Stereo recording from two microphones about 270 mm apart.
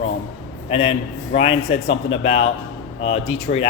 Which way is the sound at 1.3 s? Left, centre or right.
Left.